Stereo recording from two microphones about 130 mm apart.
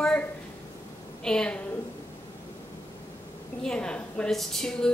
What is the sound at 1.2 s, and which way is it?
Speech, 5° left (ahead or behind).